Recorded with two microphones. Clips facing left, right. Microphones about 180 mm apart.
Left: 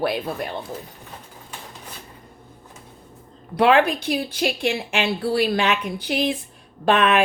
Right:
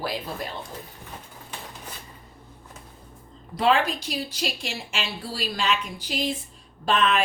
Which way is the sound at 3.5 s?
65° left (ahead or behind).